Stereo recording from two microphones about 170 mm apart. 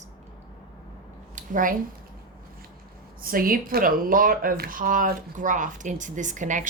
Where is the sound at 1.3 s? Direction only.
50° right (ahead or behind).